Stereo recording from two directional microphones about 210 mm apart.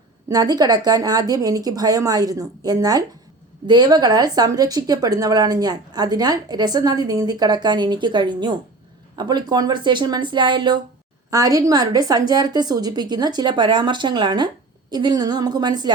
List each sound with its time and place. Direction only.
0.3 s a woman's voice: 20° right (ahead or behind)